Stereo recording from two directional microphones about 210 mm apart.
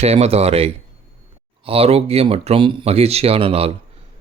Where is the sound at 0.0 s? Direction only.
30° right (ahead or behind).